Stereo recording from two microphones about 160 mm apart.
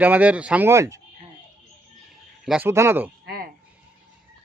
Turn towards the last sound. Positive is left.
turn(degrees=-75)  # may be behind; listen again after turning